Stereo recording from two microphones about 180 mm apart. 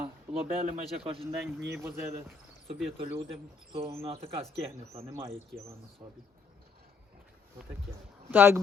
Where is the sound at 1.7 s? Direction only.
15° right (ahead or behind).